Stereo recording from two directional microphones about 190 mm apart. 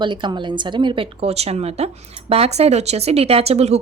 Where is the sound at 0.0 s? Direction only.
25° right (ahead or behind).